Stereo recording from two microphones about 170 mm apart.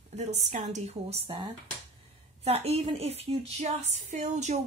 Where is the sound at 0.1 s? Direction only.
40° right (ahead or behind).